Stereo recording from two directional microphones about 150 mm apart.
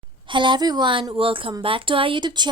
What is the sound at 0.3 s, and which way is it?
A woman's voice, 30° right (ahead or behind).